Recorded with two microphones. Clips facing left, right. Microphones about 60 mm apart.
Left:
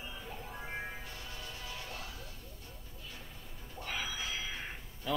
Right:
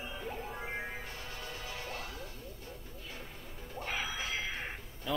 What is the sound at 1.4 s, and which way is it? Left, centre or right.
Music, right.